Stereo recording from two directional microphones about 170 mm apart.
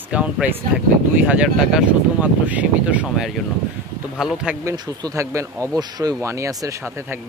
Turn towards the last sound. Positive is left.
turn(degrees=-20)  # may be behind; listen again after turning